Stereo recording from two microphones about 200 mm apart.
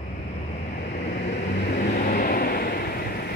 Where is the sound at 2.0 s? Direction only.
45° left (ahead or behind).